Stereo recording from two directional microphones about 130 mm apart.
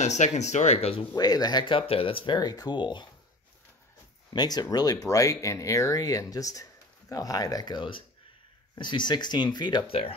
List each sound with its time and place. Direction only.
0.0 s speech: 60° left (ahead or behind)
1.1 s speech: 30° left (ahead or behind)
4.3 s speech: 30° left (ahead or behind)